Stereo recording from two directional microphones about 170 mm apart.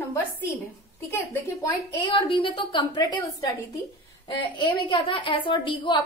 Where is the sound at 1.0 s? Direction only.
15° left (ahead or behind).